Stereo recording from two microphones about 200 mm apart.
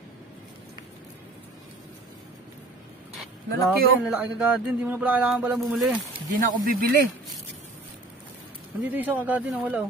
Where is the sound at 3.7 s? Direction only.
5° right (ahead or behind).